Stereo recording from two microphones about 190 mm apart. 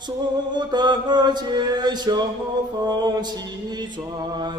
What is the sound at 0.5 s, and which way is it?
Mantra, 25° right (ahead or behind).